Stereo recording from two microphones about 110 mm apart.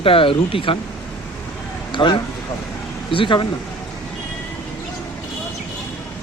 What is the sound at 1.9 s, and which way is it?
Speech, 45° left (ahead or behind).